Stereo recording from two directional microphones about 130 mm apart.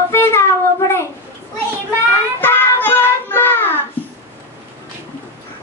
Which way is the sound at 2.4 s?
15° left (ahead or behind).